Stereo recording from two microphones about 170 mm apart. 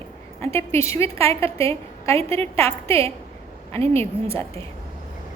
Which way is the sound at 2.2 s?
35° right (ahead or behind).